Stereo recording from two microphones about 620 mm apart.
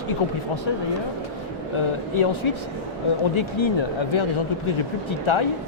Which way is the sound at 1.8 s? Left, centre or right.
Left.